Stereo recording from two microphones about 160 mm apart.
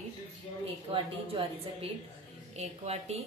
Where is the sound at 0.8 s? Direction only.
35° right (ahead or behind).